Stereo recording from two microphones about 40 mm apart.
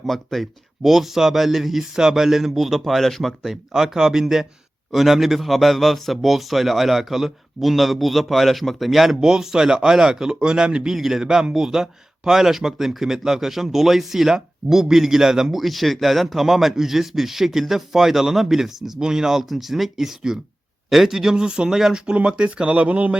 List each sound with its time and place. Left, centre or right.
0.0 s a man's voice: centre
3.4 s a man's voice: centre
9.2 s speech: centre
15.6 s a man's voice: centre; by 21.8 s right
21.8 s speech: centre
22.1 s speech: right